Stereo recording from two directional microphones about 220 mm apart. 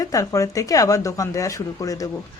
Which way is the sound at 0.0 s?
15° left (ahead or behind).